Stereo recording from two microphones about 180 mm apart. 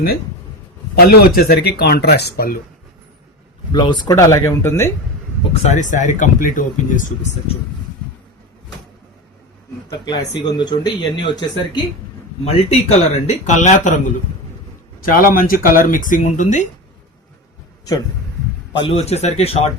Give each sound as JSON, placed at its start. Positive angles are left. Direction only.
{"t": 0.9, "sound": "speech", "side_deg": 55}
{"t": 3.7, "sound": "speech", "side_deg": 25}
{"t": 5.6, "sound": "speech", "side_deg": 40}
{"t": 9.9, "sound": "speech", "side_deg": 25}
{"t": 12.5, "sound": "speech", "side_deg": 35}
{"t": 15.0, "sound": "speech", "side_deg": 50}
{"t": 18.8, "sound": "speech", "side_deg": 35}